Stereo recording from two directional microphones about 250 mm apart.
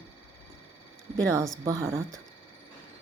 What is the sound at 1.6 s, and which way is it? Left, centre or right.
Speech, centre.